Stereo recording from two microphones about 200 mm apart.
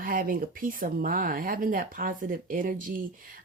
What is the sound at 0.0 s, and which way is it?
Speech, 45° right (ahead or behind).